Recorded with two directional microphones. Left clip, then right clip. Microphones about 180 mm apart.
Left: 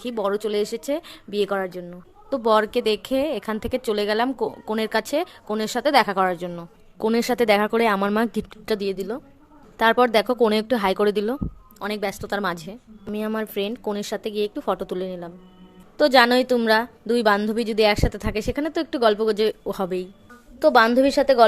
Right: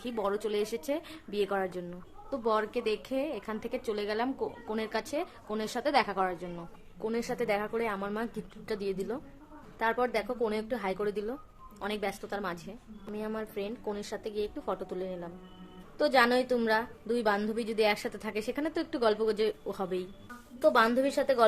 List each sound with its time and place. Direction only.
0.0 s a woman's voice: 35° left (ahead or behind)
2.3 s a woman's voice: 40° left (ahead or behind)
7.0 s speech: 50° left (ahead or behind); by 9.2 s 30° left (ahead or behind)
9.7 s speech: 50° left (ahead or behind)
11.8 s a woman's voice: 35° left (ahead or behind)
20.6 s a woman's voice: 30° left (ahead or behind)